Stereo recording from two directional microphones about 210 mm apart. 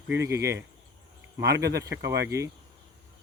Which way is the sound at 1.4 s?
50° right (ahead or behind).